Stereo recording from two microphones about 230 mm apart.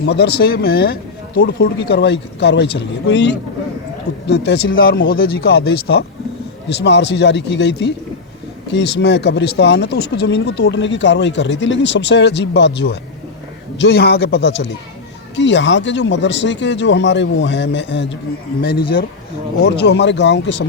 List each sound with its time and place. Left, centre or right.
0.0 s speech: left
19.6 s speech: left